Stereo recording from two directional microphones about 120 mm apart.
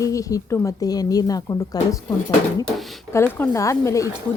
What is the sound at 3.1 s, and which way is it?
Speech, 20° left (ahead or behind).